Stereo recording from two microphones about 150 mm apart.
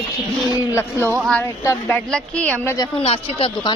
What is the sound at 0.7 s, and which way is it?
Speech, 15° left (ahead or behind).